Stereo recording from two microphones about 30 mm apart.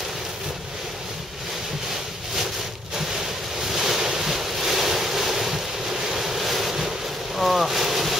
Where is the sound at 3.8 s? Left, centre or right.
Centre.